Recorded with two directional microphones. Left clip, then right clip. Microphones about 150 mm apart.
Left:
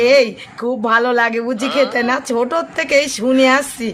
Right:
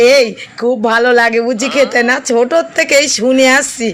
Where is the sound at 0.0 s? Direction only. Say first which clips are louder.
Right 4 dB; 25° right (ahead or behind).